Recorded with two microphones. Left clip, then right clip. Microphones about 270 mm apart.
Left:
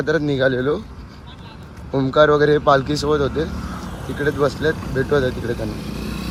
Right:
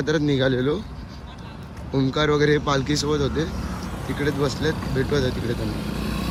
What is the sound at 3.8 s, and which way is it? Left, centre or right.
Vehicle, right.